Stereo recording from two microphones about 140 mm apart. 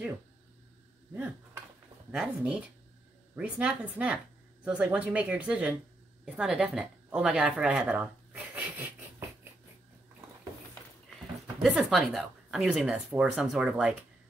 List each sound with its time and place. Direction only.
2.1 s a woman's voice: 10° right (ahead or behind)
11.6 s speech: 5° right (ahead or behind)